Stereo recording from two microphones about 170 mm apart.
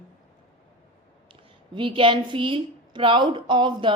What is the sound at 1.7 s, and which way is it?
A woman's voice, 30° right (ahead or behind).